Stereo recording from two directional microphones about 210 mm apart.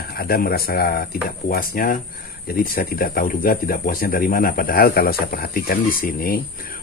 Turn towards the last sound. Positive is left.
turn(degrees=40)  # may be behind; listen again after turning